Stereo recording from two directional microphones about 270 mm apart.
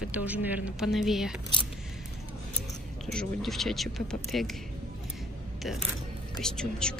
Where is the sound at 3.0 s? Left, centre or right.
Centre.